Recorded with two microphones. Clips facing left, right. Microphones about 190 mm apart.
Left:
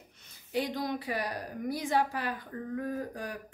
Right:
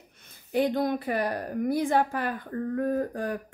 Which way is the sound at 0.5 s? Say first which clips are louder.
Right 7 dB; 55° right (ahead or behind).